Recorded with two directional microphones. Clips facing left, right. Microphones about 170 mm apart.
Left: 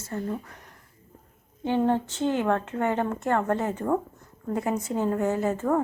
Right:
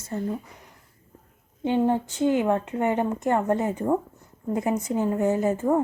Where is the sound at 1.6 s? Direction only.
15° right (ahead or behind).